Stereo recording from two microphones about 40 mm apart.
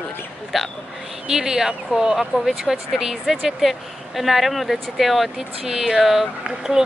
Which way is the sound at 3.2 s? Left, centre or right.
Centre.